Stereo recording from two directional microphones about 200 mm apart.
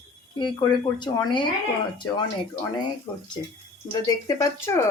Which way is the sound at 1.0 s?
25° left (ahead or behind).